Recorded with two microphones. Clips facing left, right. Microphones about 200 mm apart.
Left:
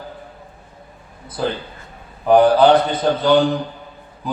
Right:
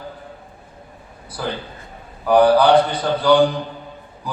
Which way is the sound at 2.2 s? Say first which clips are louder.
Left 1 dB; 20° left (ahead or behind).